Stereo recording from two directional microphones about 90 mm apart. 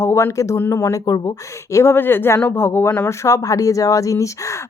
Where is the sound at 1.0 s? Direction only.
40° left (ahead or behind); by 3.1 s 25° left (ahead or behind).